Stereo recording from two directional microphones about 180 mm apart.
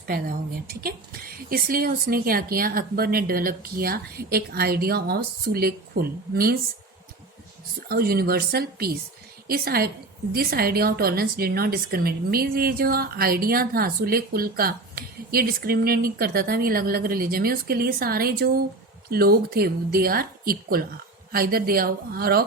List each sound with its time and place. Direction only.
0.1 s a woman's voice: 55° right (ahead or behind)
7.9 s a woman's voice: 60° right (ahead or behind)